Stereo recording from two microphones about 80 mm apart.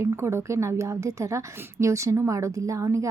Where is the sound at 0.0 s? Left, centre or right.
Right.